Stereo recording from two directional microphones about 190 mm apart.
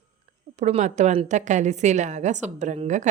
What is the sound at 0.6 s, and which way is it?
Speech, 35° right (ahead or behind).